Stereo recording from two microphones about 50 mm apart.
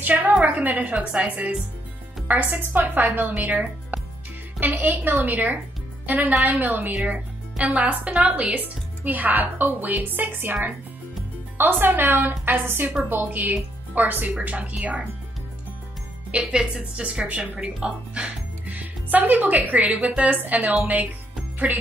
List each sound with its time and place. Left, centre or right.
0.4 s a woman's voice: right
2.2 s a woman's voice: right
16.3 s a woman's voice: right